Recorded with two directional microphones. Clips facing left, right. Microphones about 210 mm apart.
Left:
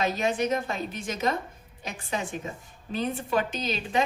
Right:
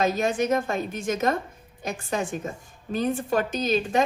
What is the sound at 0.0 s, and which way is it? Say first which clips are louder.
A woman's voice: right 3 dB; 45° right (ahead or behind).